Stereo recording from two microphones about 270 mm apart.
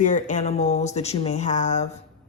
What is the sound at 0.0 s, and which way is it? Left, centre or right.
Speech, left.